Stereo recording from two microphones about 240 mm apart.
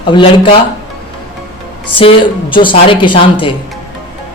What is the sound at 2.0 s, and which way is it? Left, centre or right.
A woman's voice, left.